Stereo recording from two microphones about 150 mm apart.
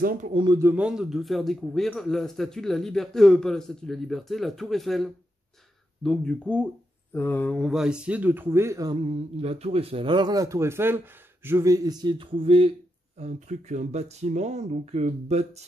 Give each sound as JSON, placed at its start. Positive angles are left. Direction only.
{"t": 0.0, "sound": "speech", "side_deg": -70}
{"t": 0.3, "sound": "speech", "side_deg": -35}
{"t": 0.6, "sound": "a man's voice", "side_deg": -10}
{"t": 8.9, "sound": "a man's voice", "side_deg": -40}
{"t": 13.2, "sound": "speech", "side_deg": -55}